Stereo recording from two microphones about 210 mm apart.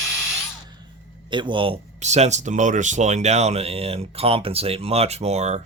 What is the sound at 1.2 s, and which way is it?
Speech, 20° right (ahead or behind).